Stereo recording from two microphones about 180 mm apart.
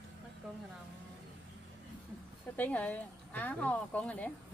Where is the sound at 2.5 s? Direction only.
10° left (ahead or behind).